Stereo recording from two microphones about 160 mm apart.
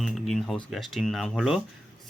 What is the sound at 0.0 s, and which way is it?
Speech, centre (ahead or behind).